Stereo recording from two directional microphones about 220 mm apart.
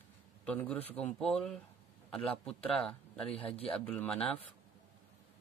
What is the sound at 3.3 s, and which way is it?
Speech, 25° left (ahead or behind).